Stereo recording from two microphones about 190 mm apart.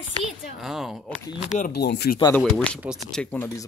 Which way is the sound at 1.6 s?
60° left (ahead or behind).